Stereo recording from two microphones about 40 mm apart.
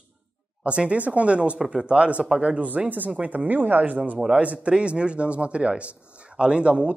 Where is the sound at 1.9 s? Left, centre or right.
Right.